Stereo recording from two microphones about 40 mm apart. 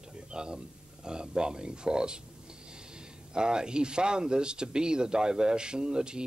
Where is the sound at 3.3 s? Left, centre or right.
Centre.